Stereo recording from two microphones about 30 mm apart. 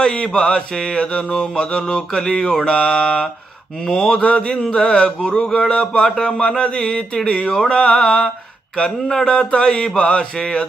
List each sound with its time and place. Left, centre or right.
0.0 s mantra: left
3.8 s a man's voice: left
4.2 s mantra: left
4.5 s a man's voice: left
7.2 s mantra: left
7.5 s a man's voice: left
9.2 s mantra: left
10.0 s mantra: left